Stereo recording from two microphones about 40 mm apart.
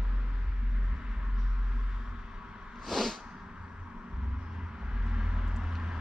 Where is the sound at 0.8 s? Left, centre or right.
Centre.